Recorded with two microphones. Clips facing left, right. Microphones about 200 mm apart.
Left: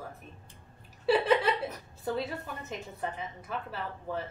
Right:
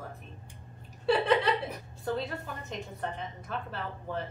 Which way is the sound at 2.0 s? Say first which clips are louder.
Even; 5° left (ahead or behind).